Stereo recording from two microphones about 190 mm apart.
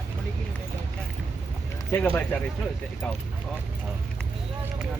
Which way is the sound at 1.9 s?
10° left (ahead or behind).